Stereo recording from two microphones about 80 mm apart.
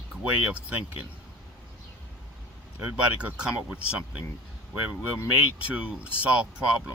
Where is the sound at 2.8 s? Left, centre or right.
Centre.